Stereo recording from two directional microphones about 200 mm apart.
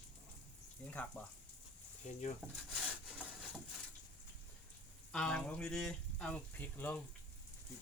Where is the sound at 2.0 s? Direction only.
35° left (ahead or behind).